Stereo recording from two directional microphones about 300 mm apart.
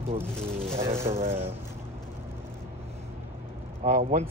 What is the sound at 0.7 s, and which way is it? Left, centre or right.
Speech, centre.